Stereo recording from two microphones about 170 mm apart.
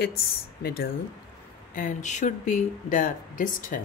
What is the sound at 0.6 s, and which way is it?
Speech, 65° left (ahead or behind).